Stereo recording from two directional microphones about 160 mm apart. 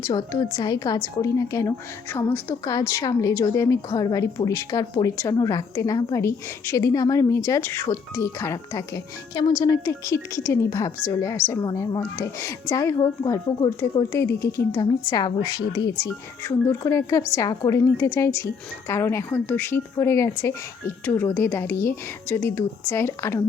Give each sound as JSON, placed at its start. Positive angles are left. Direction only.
{"t": 0.1, "sound": "a woman's voice", "side_deg": 25}